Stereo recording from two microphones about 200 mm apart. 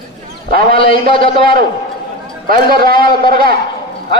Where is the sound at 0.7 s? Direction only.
25° left (ahead or behind).